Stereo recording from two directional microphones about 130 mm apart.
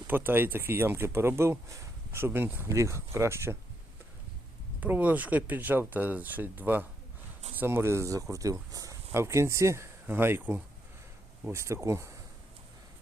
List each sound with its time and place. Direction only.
0.1 s speech: 15° right (ahead or behind)
4.8 s speech: 10° right (ahead or behind)